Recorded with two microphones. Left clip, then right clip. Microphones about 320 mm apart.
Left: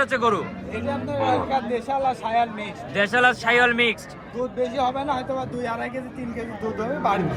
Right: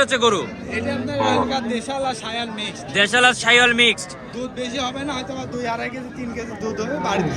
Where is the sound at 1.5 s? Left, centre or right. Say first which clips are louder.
Even; centre.